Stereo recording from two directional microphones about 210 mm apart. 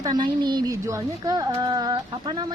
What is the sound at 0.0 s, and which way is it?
A woman's voice, 20° right (ahead or behind).